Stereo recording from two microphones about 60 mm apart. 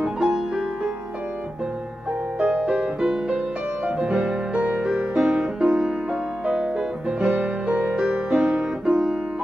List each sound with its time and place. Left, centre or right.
0.0 s music: centre
2.3 s music: centre